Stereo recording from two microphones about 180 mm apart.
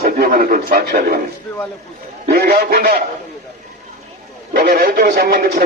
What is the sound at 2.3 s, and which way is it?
Speech, 55° right (ahead or behind).